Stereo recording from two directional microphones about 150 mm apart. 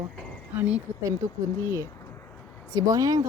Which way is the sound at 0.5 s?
10° right (ahead or behind).